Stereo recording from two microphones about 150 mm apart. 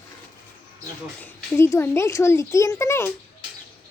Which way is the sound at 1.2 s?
15° left (ahead or behind).